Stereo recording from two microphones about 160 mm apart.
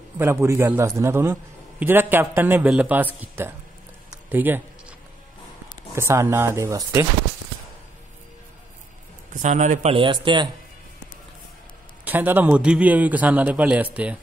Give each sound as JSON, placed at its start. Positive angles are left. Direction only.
{"t": 0.2, "sound": "a man's voice", "side_deg": -15}
{"t": 4.3, "sound": "a sound", "side_deg": -10}
{"t": 5.9, "sound": "a man's voice", "side_deg": -15}
{"t": 9.3, "sound": "a man's voice", "side_deg": -50}
{"t": 9.9, "sound": "speech", "side_deg": -30}
{"t": 12.0, "sound": "a man's voice", "side_deg": -10}